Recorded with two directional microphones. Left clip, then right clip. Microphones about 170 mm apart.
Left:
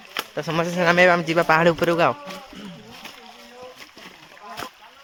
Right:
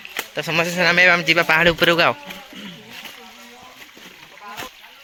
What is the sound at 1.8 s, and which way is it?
Speech, centre (ahead or behind).